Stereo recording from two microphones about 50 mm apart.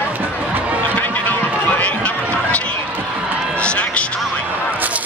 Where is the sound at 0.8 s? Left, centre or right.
Left.